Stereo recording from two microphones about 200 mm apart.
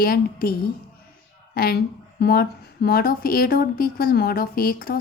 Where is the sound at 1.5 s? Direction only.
50° left (ahead or behind).